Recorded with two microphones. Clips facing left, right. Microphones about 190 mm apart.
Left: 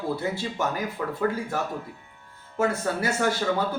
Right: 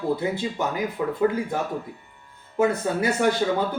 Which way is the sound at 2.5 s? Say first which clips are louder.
Right 3 dB; 15° right (ahead or behind).